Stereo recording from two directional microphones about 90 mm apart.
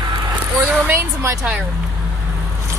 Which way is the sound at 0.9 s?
30° right (ahead or behind).